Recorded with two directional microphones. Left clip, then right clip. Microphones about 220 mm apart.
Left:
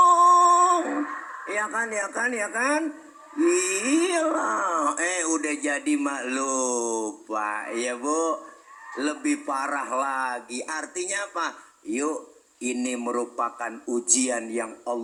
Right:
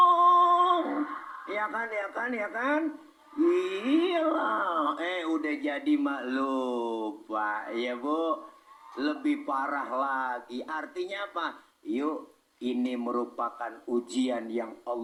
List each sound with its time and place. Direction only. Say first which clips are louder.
0.0 s a sound: left 4 dB; 35° left (ahead or behind)
3.3 s speech: left 3 dB; 35° left (ahead or behind)
12.9 s speech: left 4 dB; 35° left (ahead or behind)